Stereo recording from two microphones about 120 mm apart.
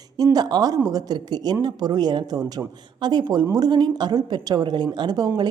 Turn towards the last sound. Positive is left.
turn(degrees=-35)  # may be behind; listen again after turning